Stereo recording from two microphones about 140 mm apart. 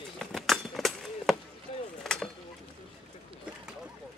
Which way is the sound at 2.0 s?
Centre (ahead or behind).